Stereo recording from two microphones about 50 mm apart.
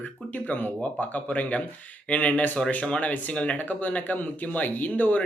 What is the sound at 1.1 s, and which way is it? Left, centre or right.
Speech, left.